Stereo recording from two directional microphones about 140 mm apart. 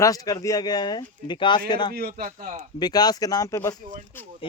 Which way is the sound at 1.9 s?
90° right.